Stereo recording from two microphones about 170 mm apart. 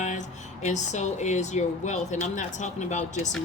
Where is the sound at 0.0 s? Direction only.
45° left (ahead or behind).